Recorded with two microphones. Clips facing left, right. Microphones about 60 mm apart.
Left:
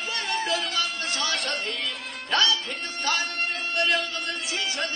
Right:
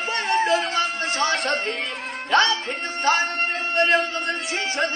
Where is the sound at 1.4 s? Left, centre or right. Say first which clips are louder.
Right 6 dB; right.